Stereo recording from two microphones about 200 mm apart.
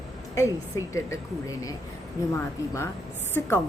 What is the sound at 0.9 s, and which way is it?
A woman's voice, 15° left (ahead or behind).